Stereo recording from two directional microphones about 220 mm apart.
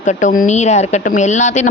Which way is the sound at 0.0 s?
35° left (ahead or behind).